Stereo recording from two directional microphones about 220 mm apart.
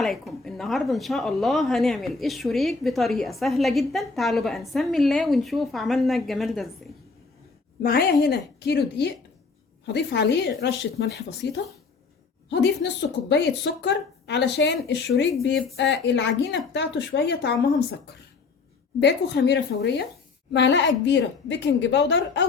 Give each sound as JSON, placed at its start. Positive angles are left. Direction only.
{"t": 0.0, "sound": "speech", "side_deg": 0}
{"t": 7.8, "sound": "speech", "side_deg": 45}